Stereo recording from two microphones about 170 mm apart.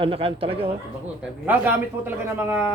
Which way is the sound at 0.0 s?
35° right (ahead or behind).